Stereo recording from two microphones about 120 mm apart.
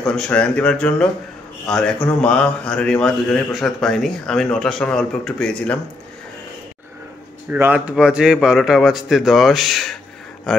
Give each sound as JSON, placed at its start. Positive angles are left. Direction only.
{"t": 0.0, "sound": "a man's voice", "side_deg": 5}
{"t": 7.5, "sound": "a man's voice", "side_deg": -15}